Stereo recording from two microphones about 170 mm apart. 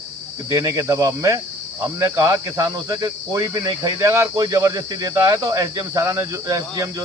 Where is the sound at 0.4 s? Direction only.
20° right (ahead or behind).